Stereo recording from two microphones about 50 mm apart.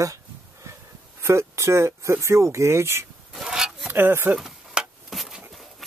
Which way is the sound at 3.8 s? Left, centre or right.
Right.